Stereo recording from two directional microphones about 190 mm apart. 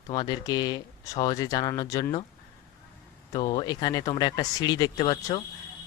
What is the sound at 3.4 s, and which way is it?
Speech, 20° left (ahead or behind).